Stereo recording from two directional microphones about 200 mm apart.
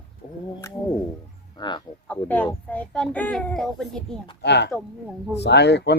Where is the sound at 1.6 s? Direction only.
20° left (ahead or behind).